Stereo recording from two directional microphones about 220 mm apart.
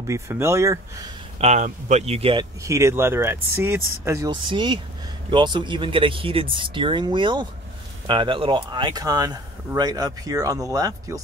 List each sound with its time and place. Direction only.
0.0 s speech: 10° right (ahead or behind)
1.4 s speech: 30° right (ahead or behind)
2.6 s speech: 15° right (ahead or behind)